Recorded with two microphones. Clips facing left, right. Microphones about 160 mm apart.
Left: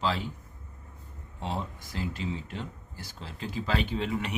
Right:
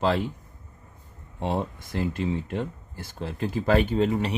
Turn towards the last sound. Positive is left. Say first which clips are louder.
# right 7 dB
turn(degrees=-40)  # may be behind; listen again after turning